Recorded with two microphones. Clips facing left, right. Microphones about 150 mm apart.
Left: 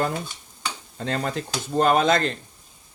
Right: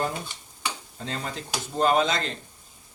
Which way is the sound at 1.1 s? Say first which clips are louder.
Left 6 dB; 60° left (ahead or behind).